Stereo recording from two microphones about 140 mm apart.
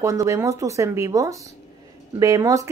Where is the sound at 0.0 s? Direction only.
20° right (ahead or behind).